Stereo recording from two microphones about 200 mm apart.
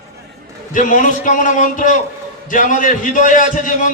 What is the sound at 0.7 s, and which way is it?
A man's voice, 40° left (ahead or behind).